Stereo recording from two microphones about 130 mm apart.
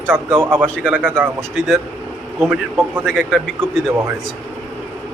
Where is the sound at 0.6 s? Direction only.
5° left (ahead or behind).